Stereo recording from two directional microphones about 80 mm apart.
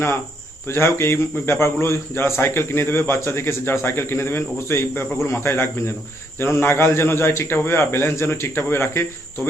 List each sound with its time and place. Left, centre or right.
0.9 s a man's voice: left